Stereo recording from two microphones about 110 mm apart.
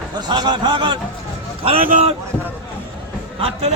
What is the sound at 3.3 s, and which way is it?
Speech, 60° right (ahead or behind).